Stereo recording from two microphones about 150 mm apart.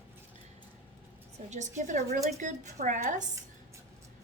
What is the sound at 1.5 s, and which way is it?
A woman's voice, 55° right (ahead or behind).